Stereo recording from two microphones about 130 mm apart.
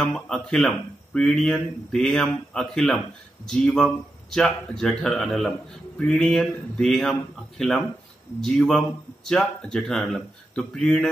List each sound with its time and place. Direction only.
0.0 s speech: 5° left (ahead or behind)